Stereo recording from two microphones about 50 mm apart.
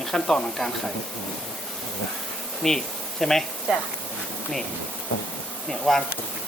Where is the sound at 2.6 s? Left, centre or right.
Centre.